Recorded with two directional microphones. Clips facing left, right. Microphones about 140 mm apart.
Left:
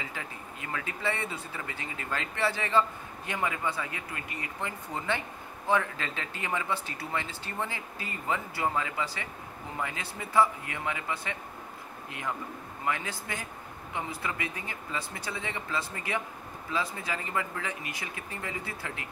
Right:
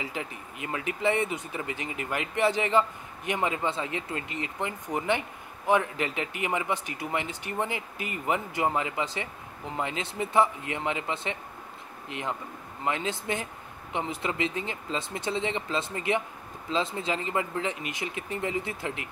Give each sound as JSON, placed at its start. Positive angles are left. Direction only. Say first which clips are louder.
{"t": 0.0, "sound": "a man's voice", "louder": "right 4 dB", "side_deg": -20}